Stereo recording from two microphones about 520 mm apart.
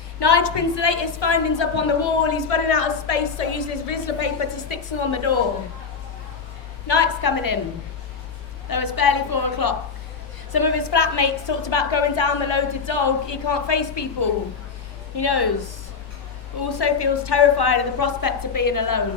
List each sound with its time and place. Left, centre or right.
0.2 s a woman's voice: left
6.8 s a woman's voice: left
8.7 s a woman's voice: left
15.1 s a woman's voice: left
16.6 s a woman's voice: left